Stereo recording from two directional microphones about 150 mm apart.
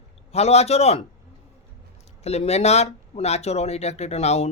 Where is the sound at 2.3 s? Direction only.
45° left (ahead or behind).